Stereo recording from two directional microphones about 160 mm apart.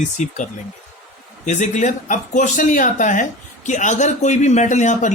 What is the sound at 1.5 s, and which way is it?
Speech, 50° left (ahead or behind).